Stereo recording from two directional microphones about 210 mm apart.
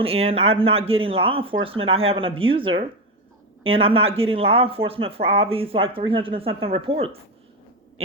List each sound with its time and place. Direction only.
0.0 s speech: 25° right (ahead or behind)